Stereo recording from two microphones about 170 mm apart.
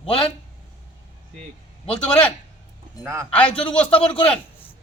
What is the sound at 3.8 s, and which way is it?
Speech, 35° left (ahead or behind).